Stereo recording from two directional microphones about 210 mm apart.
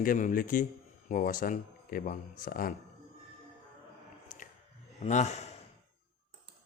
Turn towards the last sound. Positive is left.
turn(degrees=30)  # may be behind; listen again after turning